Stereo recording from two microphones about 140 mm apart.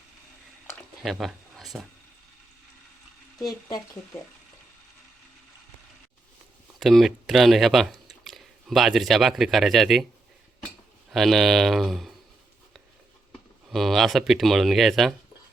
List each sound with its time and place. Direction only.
1.0 s speech: centre (ahead or behind)
3.3 s speech: 25° left (ahead or behind)
6.7 s speech: centre (ahead or behind)
11.1 s speech: centre (ahead or behind)
13.7 s speech: centre (ahead or behind)